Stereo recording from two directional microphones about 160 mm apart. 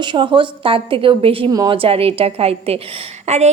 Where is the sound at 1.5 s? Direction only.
25° right (ahead or behind).